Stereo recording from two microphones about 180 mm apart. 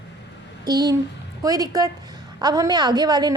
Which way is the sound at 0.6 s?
20° right (ahead or behind).